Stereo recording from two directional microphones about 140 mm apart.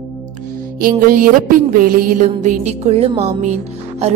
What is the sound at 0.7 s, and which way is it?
Music, 90° right.